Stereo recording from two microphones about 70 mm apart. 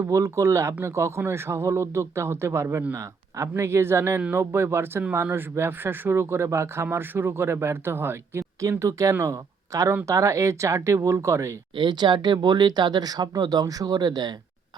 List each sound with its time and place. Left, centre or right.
0.0 s speech: right
3.5 s speech: right
8.8 s speech: right
11.9 s speech: right